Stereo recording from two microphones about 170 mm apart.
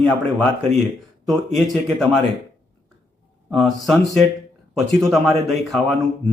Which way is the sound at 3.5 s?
Centre (ahead or behind).